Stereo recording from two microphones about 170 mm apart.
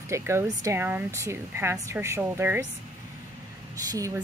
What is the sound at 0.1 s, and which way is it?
A woman's voice, 15° right (ahead or behind).